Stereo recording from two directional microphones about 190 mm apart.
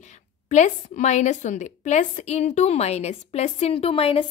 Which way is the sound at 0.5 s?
40° left (ahead or behind).